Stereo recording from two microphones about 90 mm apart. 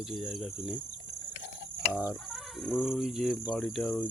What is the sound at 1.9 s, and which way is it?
Cricket, 15° right (ahead or behind).